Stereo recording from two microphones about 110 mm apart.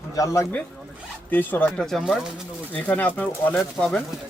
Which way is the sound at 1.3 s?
15° left (ahead or behind).